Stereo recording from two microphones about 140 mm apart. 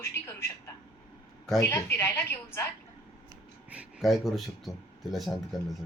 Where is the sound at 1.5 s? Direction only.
20° left (ahead or behind).